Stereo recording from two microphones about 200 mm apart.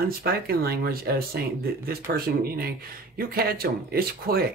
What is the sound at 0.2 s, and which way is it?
Speech, 50° right (ahead or behind).